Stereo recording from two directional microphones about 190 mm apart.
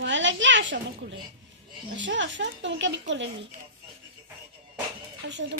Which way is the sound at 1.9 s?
75° right (ahead or behind).